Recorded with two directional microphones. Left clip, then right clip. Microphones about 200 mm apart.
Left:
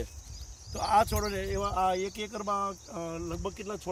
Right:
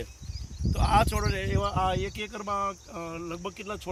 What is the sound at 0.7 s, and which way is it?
Speech, 5° left (ahead or behind).